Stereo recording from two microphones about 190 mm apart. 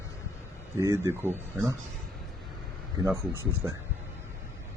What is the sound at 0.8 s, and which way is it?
Speech, 15° right (ahead or behind).